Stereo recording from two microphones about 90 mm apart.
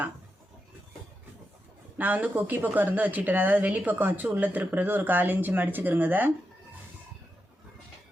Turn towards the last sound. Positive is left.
turn(degrees=-20)  # may be behind; listen again after turning